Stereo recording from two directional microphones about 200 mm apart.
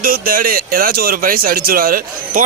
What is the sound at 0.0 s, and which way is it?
Speech, 45° right (ahead or behind).